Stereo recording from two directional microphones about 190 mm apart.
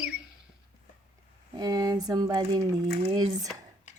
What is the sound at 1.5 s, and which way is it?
Speech, 20° right (ahead or behind).